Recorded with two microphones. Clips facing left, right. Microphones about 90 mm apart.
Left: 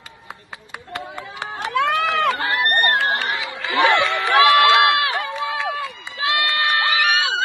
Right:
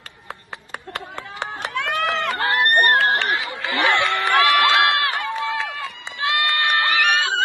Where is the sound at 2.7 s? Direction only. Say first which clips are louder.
Right 3 dB; 20° right (ahead or behind).